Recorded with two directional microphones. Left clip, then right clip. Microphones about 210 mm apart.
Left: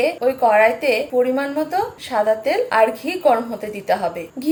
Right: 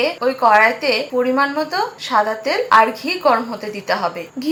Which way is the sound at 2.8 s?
10° left (ahead or behind).